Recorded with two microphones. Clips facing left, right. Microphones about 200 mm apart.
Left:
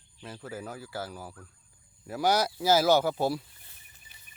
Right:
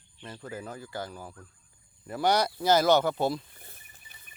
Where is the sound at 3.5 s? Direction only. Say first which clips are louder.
Right 7 dB; 50° right (ahead or behind).